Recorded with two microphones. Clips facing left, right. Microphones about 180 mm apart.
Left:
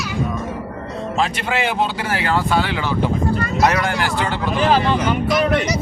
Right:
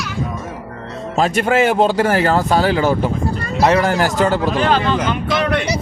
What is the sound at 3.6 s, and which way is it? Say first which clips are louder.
Speech: right 5 dB; 30° right (ahead or behind).